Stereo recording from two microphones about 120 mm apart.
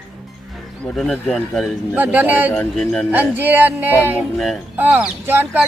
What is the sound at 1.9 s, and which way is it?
Speech, 10° right (ahead or behind).